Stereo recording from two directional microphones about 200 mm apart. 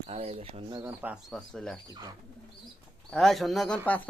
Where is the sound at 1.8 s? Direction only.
20° right (ahead or behind).